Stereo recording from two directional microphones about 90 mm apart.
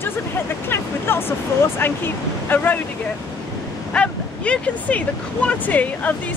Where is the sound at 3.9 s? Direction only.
15° left (ahead or behind).